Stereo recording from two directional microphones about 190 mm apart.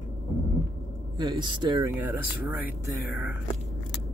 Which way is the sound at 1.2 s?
25° right (ahead or behind).